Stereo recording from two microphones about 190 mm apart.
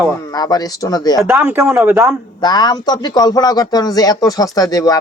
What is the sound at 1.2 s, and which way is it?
Speech, 10° right (ahead or behind).